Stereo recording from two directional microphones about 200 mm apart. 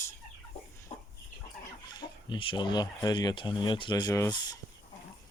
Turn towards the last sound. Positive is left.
turn(degrees=20)  # may be behind; listen again after turning